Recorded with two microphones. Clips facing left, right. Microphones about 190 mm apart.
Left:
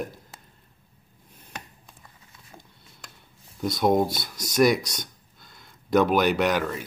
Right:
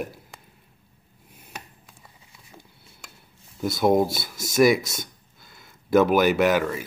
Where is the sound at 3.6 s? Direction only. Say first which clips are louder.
Right 2 dB; 5° right (ahead or behind).